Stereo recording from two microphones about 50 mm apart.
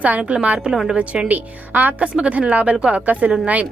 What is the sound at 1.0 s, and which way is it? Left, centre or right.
Speech, right.